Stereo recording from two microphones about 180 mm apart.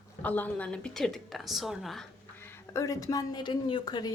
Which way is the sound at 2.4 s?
15° left (ahead or behind).